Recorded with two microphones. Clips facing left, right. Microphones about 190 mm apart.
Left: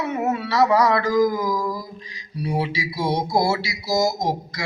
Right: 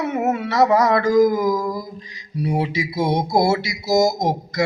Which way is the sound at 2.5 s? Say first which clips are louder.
Right 2 dB; 45° right (ahead or behind).